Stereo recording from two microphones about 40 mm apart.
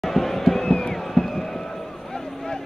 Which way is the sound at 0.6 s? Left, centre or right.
Centre.